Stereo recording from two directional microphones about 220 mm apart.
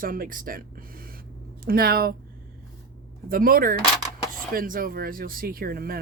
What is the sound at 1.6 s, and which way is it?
Speech, 45° right (ahead or behind).